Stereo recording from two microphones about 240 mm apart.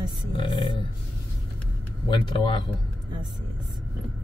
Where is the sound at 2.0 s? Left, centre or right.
Left.